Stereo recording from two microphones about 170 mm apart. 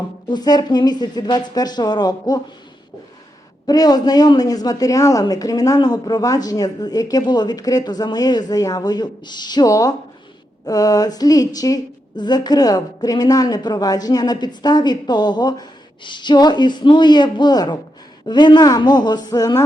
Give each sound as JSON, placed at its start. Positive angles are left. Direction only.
{"t": 0.3, "sound": "speech", "side_deg": 25}
{"t": 3.7, "sound": "speech", "side_deg": 25}